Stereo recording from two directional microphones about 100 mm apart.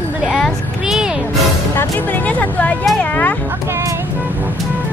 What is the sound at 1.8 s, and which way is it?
Speech, 15° left (ahead or behind).